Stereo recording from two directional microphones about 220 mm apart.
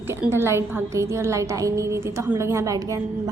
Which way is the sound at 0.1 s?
10° right (ahead or behind).